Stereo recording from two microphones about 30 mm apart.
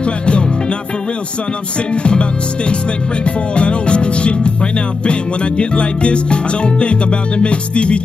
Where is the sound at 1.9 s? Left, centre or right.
Left.